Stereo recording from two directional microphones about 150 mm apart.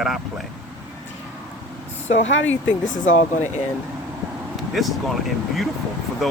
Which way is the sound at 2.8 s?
60° left (ahead or behind).